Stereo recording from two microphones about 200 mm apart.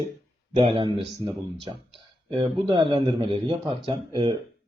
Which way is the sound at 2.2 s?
25° right (ahead or behind).